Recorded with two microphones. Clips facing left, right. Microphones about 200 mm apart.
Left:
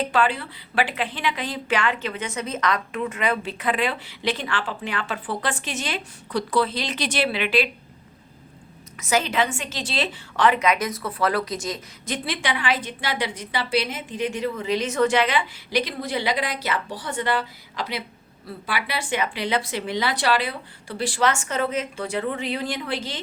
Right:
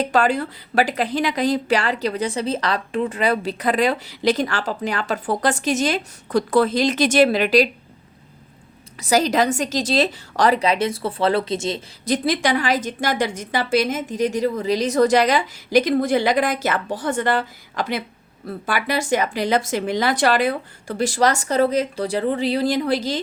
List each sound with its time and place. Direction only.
0.0 s a woman's voice: 45° right (ahead or behind)
9.0 s a woman's voice: 35° right (ahead or behind)